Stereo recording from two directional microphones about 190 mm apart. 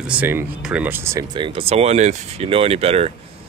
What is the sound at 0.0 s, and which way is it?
Speech, 10° right (ahead or behind).